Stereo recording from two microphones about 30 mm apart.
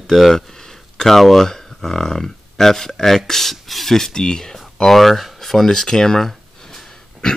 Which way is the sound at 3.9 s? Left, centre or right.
Centre.